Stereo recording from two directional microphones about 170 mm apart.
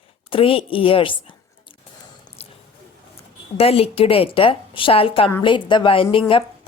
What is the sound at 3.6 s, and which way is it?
Speech, 35° left (ahead or behind).